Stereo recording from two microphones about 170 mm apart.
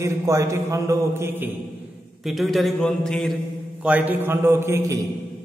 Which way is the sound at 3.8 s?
10° right (ahead or behind).